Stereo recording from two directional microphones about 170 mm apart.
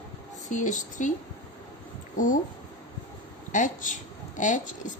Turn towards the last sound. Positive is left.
turn(degrees=45)  # may be behind; listen again after turning